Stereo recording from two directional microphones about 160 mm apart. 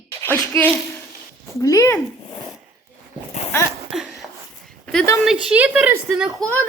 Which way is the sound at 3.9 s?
Centre (ahead or behind).